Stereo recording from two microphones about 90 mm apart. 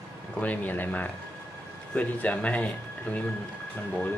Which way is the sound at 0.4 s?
20° left (ahead or behind).